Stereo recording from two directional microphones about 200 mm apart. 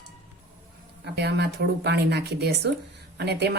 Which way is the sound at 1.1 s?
55° right (ahead or behind).